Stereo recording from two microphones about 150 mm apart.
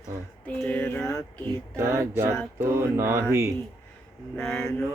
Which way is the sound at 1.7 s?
20° right (ahead or behind).